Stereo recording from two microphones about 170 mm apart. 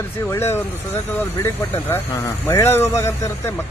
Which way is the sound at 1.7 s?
15° left (ahead or behind).